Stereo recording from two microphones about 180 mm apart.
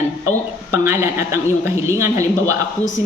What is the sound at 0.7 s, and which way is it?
Speech, 15° right (ahead or behind).